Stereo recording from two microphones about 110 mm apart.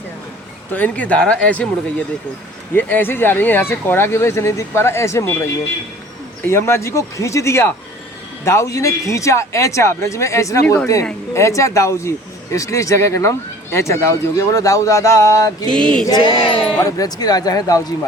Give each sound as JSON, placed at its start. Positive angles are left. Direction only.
{"t": 0.7, "sound": "speech", "side_deg": 15}
{"t": 2.7, "sound": "speech", "side_deg": 20}
{"t": 6.4, "sound": "speech", "side_deg": 25}
{"t": 15.7, "sound": "speech", "side_deg": 10}
{"t": 16.0, "sound": "speech", "side_deg": 35}
{"t": 16.4, "sound": "speech", "side_deg": 45}
{"t": 16.8, "sound": "speech", "side_deg": 35}